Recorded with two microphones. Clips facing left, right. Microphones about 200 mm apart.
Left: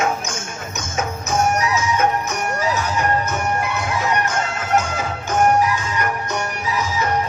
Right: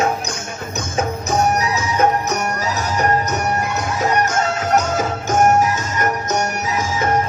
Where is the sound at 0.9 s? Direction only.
35° right (ahead or behind).